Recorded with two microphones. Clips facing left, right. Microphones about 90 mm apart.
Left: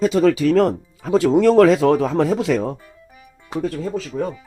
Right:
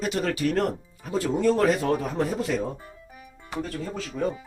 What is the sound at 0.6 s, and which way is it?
Speech, 90° left.